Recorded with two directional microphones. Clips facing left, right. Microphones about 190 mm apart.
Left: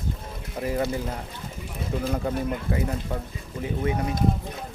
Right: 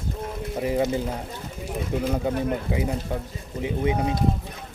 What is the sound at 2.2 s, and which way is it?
Speech, 15° right (ahead or behind).